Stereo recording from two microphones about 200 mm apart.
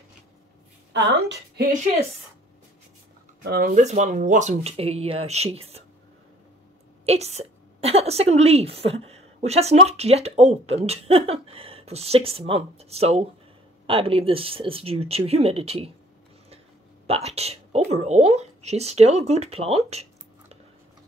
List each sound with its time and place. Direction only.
3.4 s speech: 50° right (ahead or behind)
3.7 s a woman's voice: 35° right (ahead or behind)
7.1 s a woman's voice: 30° right (ahead or behind)
17.1 s a woman's voice: 30° right (ahead or behind)